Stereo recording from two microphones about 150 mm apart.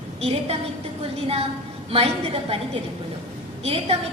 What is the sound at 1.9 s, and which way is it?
Speech, 40° right (ahead or behind).